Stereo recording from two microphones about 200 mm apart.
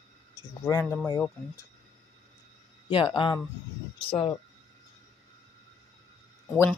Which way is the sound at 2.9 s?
25° left (ahead or behind).